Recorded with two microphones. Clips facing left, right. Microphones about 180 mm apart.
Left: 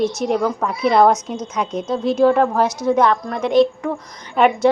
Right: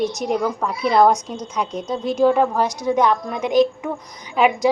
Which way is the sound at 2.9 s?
Centre (ahead or behind).